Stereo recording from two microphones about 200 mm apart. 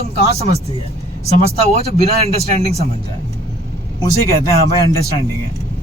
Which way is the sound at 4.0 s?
15° left (ahead or behind).